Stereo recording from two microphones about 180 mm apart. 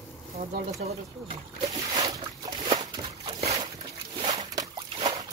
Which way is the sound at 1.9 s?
25° right (ahead or behind).